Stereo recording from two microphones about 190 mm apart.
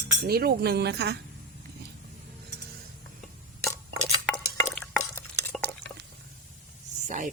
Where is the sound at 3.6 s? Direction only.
15° left (ahead or behind).